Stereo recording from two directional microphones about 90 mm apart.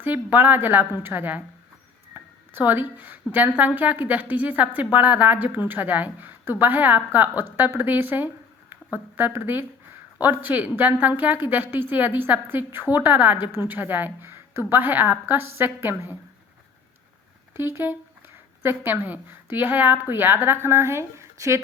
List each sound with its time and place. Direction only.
0.0 s a woman's voice: 20° right (ahead or behind)
2.1 s a sound: 25° right (ahead or behind)
3.3 s a woman's voice: 20° right (ahead or behind)
17.6 s a woman's voice: 25° right (ahead or behind)